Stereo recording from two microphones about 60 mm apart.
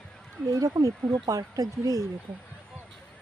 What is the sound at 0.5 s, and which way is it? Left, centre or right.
Speech, right.